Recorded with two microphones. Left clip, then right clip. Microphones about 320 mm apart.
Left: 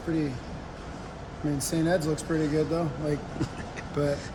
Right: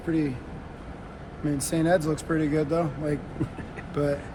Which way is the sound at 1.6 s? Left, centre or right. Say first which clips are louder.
Right 3 dB; centre.